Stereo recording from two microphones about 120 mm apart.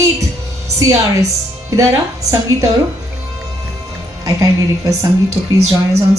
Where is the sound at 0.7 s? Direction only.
25° right (ahead or behind).